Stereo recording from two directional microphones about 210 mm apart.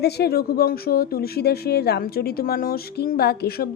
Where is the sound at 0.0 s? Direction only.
50° left (ahead or behind).